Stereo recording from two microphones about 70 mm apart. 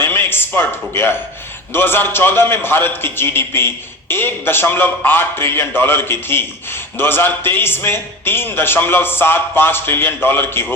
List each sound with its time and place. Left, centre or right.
0.0 s a man's voice: left